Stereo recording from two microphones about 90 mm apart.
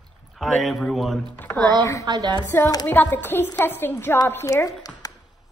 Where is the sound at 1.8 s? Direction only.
35° left (ahead or behind).